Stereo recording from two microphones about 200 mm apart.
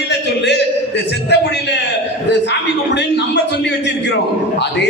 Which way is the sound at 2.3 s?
60° left (ahead or behind).